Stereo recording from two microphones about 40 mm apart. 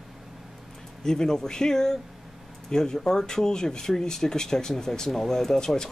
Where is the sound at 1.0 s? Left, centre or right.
Centre.